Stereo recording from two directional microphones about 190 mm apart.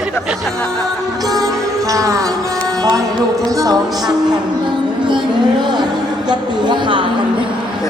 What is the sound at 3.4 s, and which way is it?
Speech, 20° right (ahead or behind).